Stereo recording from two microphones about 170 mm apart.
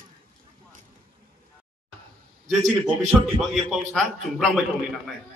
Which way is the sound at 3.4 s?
Centre (ahead or behind).